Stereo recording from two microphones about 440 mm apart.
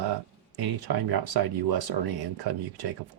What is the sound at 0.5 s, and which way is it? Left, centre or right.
Speech, right.